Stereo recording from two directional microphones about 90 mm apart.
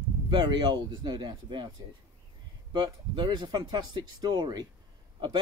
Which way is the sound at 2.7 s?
55° right (ahead or behind).